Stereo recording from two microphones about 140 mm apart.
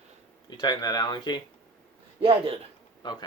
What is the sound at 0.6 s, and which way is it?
Speech, 30° left (ahead or behind).